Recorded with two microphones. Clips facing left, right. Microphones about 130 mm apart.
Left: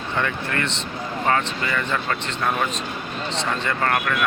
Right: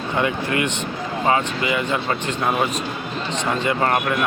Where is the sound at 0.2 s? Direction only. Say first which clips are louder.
Right 4 dB; 15° right (ahead or behind).